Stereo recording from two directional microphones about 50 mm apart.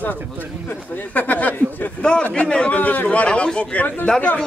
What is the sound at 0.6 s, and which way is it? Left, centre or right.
Speech, left.